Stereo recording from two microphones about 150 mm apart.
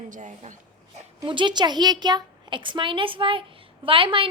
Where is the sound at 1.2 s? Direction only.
30° right (ahead or behind).